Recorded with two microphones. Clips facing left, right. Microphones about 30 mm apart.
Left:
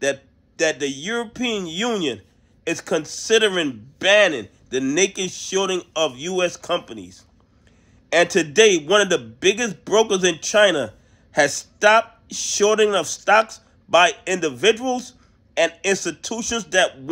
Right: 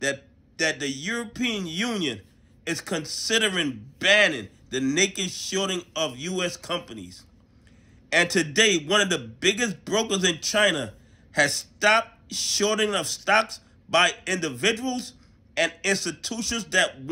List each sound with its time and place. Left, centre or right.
0.0 s a man's voice: right